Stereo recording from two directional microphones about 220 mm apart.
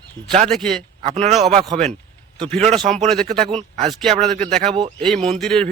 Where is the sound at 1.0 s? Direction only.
30° right (ahead or behind).